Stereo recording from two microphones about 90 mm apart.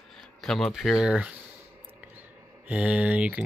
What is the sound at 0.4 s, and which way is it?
Speech, 5° left (ahead or behind).